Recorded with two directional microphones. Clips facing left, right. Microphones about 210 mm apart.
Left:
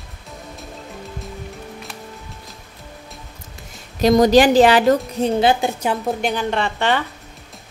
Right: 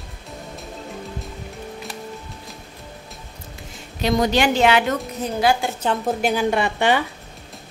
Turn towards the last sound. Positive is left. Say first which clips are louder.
# right 1 dB
turn(degrees=-15)  # may be behind; listen again after turning